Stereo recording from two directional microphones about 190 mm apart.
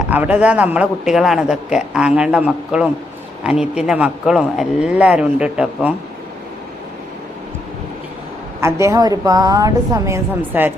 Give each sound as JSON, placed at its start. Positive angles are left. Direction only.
{"t": 0.1, "sound": "a man's voice", "side_deg": -5}
{"t": 8.6, "sound": "a woman's voice", "side_deg": -15}